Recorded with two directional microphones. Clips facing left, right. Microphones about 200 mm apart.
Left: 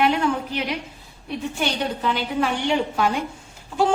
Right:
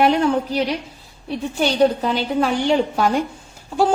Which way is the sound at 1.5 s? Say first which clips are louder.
Right 11 dB; 35° right (ahead or behind).